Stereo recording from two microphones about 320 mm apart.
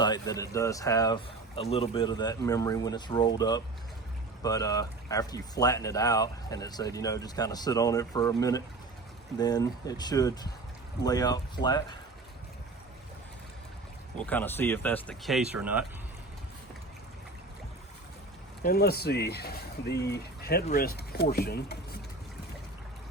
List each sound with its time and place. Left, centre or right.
0.0 s speech: centre
14.3 s speech: centre
18.6 s speech: left